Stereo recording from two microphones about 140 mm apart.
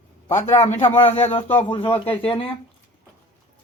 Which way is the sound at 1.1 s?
50° left (ahead or behind).